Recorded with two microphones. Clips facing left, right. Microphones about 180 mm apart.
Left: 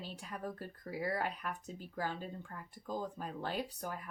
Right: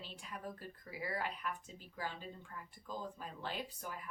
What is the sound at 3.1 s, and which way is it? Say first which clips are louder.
Speech: left 5 dB; 45° left (ahead or behind).